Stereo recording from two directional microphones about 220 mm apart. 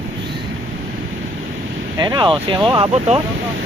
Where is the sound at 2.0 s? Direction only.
20° right (ahead or behind).